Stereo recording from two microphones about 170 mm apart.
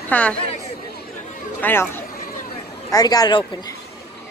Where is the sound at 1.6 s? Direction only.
10° left (ahead or behind).